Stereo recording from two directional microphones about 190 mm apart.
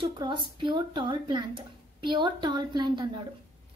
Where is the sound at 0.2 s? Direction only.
25° right (ahead or behind).